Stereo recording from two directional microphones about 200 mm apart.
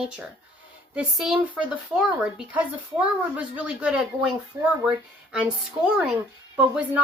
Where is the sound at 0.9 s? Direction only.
5° right (ahead or behind).